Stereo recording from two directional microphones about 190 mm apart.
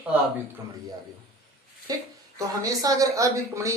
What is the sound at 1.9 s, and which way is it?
A woman's voice, 20° right (ahead or behind).